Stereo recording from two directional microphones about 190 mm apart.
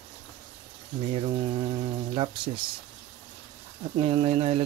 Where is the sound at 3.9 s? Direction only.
30° right (ahead or behind).